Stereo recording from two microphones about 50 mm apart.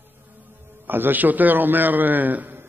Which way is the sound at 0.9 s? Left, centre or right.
Right.